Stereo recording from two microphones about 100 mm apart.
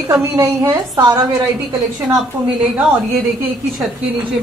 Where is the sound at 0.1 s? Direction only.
30° right (ahead or behind).